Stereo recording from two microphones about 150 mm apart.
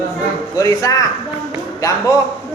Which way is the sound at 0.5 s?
20° left (ahead or behind).